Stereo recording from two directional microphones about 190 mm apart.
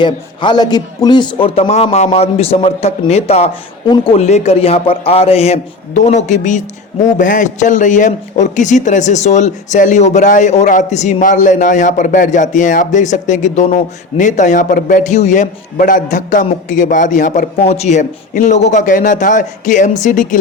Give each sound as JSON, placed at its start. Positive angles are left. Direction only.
{"t": 0.0, "sound": "a man's voice", "side_deg": 25}